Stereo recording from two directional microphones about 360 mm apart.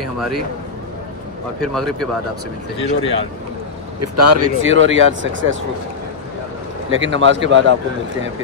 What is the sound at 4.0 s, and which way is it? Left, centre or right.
Speech, right.